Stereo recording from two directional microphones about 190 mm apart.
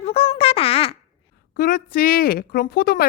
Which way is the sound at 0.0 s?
30° left (ahead or behind).